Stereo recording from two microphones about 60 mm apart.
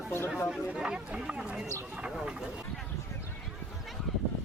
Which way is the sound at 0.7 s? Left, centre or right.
Centre.